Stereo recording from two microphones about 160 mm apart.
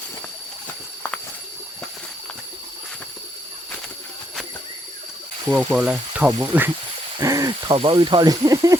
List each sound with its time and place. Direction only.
5.5 s speech: 10° right (ahead or behind)
7.2 s speech: 20° right (ahead or behind)